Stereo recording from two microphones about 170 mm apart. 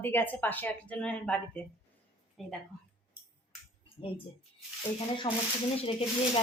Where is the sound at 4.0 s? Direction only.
35° left (ahead or behind).